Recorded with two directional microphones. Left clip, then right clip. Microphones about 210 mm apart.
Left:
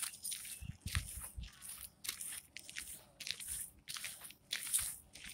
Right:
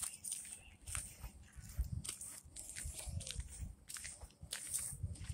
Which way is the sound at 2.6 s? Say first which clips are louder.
Left 1 dB; 15° left (ahead or behind).